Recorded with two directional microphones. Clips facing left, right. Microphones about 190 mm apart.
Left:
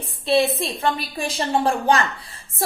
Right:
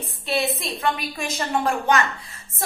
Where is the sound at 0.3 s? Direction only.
30° left (ahead or behind).